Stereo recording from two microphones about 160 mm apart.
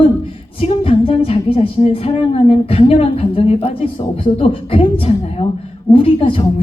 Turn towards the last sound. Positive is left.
turn(degrees=35)  # may be behind; listen again after turning